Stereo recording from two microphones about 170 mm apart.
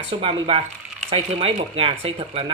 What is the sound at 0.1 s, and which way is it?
Speech, 30° right (ahead or behind).